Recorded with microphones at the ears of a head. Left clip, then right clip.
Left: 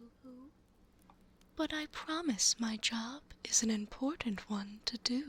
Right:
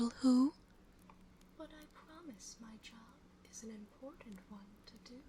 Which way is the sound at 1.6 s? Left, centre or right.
Left.